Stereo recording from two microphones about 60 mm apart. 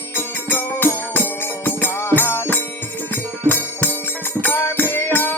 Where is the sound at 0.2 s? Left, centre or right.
Left.